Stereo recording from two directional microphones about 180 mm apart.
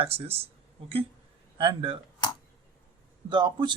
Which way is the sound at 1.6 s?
25° right (ahead or behind).